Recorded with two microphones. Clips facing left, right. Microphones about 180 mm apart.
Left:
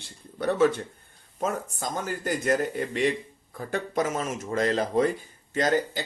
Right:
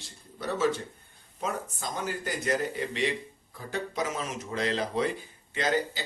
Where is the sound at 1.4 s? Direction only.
45° left (ahead or behind).